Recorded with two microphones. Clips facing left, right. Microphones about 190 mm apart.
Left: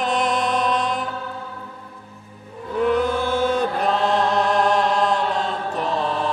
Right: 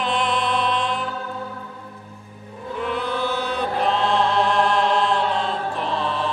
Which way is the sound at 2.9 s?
45° left (ahead or behind).